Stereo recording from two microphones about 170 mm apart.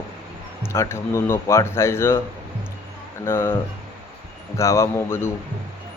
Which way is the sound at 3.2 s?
15° left (ahead or behind).